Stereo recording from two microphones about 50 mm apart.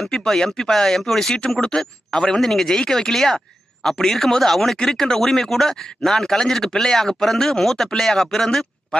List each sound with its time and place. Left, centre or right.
0.0 s speech: centre